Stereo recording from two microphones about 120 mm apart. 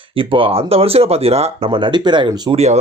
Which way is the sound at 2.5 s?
65° right (ahead or behind).